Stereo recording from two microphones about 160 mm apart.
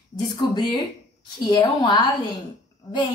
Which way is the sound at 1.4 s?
25° left (ahead or behind).